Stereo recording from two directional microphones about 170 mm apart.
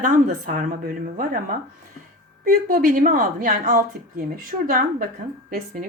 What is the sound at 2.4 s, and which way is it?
A woman's voice, 55° right (ahead or behind).